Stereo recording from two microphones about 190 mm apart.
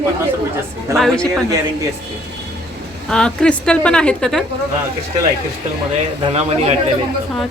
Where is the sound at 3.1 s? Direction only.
5° left (ahead or behind).